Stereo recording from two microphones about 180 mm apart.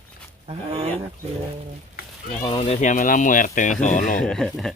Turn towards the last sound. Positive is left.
turn(degrees=0)  # may be behind; listen again after turning